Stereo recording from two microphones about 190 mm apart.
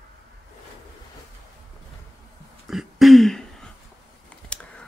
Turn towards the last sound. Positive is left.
turn(degrees=5)  # may be behind; listen again after turning